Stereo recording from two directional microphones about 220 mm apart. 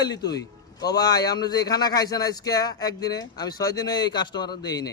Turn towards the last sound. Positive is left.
turn(degrees=20)  # may be behind; listen again after turning